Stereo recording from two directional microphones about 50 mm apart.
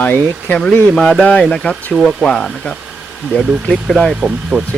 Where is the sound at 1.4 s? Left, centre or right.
Centre.